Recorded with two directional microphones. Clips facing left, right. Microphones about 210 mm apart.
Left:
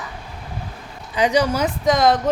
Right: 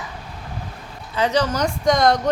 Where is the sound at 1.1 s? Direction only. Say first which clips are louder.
Left 2 dB; 15° left (ahead or behind).